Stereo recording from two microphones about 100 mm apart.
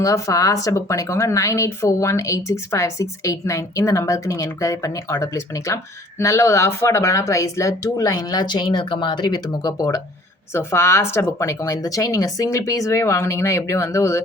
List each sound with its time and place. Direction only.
0.0 s speech: 35° left (ahead or behind)
10.5 s speech: 25° left (ahead or behind)